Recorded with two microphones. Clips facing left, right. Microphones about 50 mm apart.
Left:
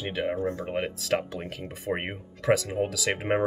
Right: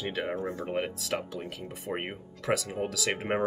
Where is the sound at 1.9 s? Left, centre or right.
Left.